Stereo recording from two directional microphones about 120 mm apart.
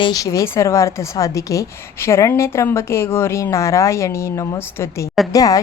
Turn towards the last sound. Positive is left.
turn(degrees=30)  # may be behind; listen again after turning